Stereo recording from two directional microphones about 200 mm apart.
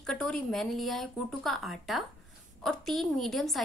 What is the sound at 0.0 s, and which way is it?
Speech, 5° left (ahead or behind).